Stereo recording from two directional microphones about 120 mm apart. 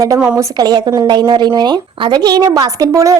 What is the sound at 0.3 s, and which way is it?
A woman's voice, 35° right (ahead or behind).